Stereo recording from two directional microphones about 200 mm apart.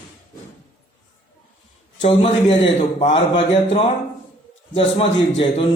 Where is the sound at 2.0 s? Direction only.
25° left (ahead or behind).